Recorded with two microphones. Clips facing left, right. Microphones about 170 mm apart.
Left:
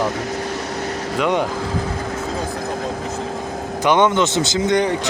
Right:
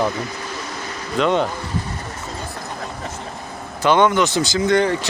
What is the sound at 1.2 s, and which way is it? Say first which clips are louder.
Speech: right 1 dB; 15° left (ahead or behind).